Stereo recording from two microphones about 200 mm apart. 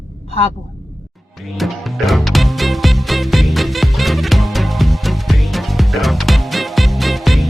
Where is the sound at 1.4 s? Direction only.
Centre (ahead or behind).